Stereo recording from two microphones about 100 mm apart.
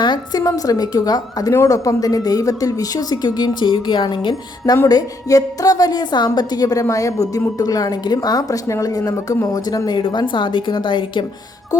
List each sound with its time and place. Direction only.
0.0 s speech: 45° left (ahead or behind)